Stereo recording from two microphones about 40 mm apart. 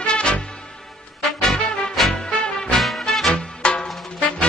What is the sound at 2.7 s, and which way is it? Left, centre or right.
Music, centre.